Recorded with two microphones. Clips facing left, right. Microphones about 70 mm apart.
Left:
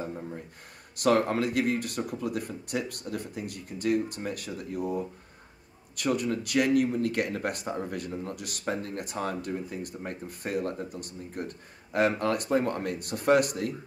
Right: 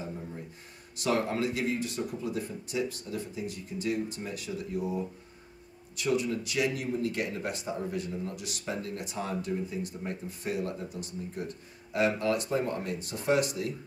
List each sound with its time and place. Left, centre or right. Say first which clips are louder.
0.9 s speech: left 5 dB; left
5.9 s speech: left 1 dB; left